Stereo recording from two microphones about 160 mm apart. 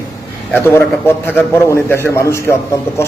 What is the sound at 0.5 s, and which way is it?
A man's voice, 15° left (ahead or behind).